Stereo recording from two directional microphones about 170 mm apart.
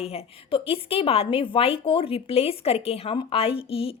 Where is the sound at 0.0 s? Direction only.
35° left (ahead or behind).